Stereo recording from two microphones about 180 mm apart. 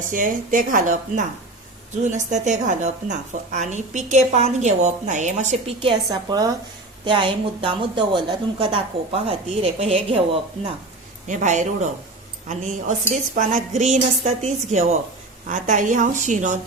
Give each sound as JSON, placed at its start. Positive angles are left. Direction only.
{"t": 0.1, "sound": "a woman's voice", "side_deg": -50}
{"t": 6.1, "sound": "a woman's voice", "side_deg": -20}
{"t": 11.3, "sound": "a woman's voice", "side_deg": -45}